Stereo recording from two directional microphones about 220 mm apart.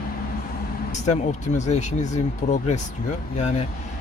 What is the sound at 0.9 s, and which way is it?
Speech, 30° left (ahead or behind).